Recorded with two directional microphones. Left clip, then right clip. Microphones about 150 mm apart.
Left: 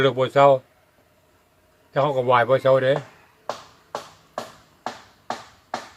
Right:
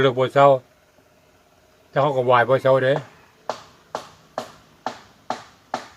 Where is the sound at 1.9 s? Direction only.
10° right (ahead or behind).